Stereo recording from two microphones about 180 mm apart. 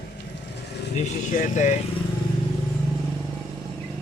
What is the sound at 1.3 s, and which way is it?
Speech, 45° left (ahead or behind).